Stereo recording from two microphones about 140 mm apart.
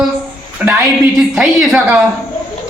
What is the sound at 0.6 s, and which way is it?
A woman's voice, 10° right (ahead or behind).